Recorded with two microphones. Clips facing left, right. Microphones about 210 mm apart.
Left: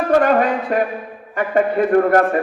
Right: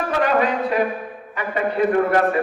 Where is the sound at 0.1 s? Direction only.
45° left (ahead or behind).